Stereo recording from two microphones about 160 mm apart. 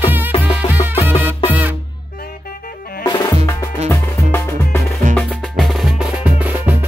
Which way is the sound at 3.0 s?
25° left (ahead or behind).